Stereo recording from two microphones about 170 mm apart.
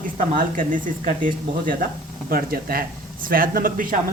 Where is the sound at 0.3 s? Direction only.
50° right (ahead or behind).